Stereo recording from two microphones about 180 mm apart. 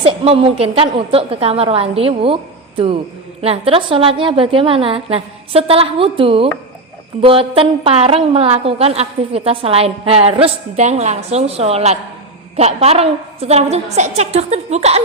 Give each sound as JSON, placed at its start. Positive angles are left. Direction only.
{"t": 0.0, "sound": "a woman's voice", "side_deg": -30}